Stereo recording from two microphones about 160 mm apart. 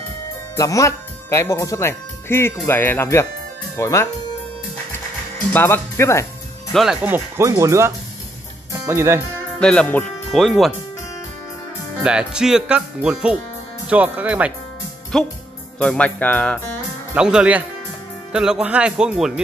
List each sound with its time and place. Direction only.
0.6 s speech: 20° left (ahead or behind)
5.5 s speech: 15° left (ahead or behind)
6.7 s speech: centre (ahead or behind)
7.0 s speech: 15° right (ahead or behind)
9.6 s speech: 5° left (ahead or behind)
12.0 s speech: 5° right (ahead or behind)
15.1 s speech: centre (ahead or behind)
17.1 s speech: 5° right (ahead or behind)